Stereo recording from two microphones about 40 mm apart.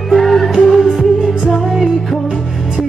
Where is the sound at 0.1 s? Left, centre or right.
Centre.